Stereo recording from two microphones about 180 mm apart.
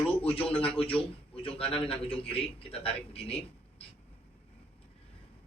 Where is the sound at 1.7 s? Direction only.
30° left (ahead or behind).